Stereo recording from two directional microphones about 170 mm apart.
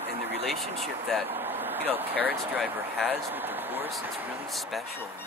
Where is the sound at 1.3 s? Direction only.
10° right (ahead or behind).